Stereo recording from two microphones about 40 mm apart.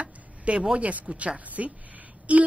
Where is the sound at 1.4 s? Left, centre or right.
Right.